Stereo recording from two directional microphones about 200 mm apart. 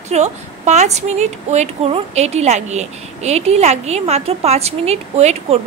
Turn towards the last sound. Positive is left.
turn(degrees=-30)  # may be behind; listen again after turning